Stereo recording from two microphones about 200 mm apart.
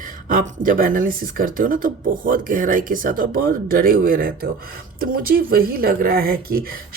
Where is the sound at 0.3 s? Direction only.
40° right (ahead or behind).